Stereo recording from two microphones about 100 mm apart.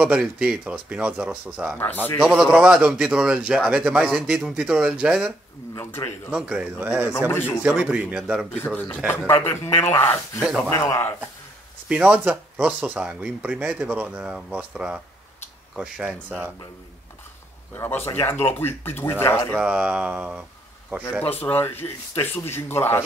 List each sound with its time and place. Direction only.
0.0 s speech: 10° right (ahead or behind)
5.8 s speech: 25° left (ahead or behind)
6.3 s speech: 10° right (ahead or behind)
6.8 s speech: 20° right (ahead or behind)
7.2 s speech: 20° left (ahead or behind)
7.6 s speech: 15° right (ahead or behind)
8.5 s speech: 15° left (ahead or behind)
9.0 s speech: 20° left (ahead or behind)
11.9 s speech: 10° right (ahead or behind)
17.7 s speech: 25° left (ahead or behind)
19.6 s speech: 10° right (ahead or behind)
21.2 s speech: 20° left (ahead or behind)